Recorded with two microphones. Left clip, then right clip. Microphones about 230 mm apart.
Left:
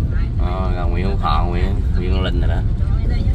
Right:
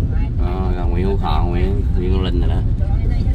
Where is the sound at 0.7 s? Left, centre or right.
Centre.